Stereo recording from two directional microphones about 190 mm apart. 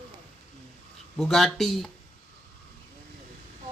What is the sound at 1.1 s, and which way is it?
Speech, centre (ahead or behind).